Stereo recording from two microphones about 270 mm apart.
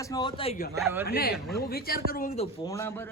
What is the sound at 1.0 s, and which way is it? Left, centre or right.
Speech, left.